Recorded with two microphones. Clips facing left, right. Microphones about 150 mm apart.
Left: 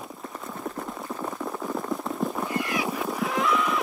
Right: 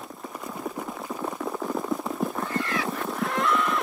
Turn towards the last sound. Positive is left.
turn(degrees=0)  # may be behind; listen again after turning